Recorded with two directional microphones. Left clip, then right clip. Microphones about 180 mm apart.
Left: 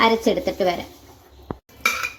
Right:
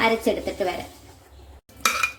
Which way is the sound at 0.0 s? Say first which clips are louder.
Left 4 dB; 30° left (ahead or behind).